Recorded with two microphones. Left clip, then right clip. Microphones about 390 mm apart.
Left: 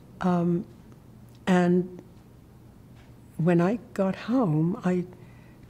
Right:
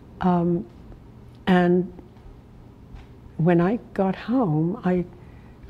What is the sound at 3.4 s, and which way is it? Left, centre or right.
Speech, centre.